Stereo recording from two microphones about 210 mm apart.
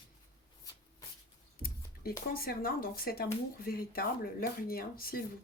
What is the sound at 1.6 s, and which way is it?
Speech, 45° left (ahead or behind).